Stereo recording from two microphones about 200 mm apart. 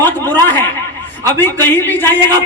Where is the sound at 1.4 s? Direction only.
10° left (ahead or behind).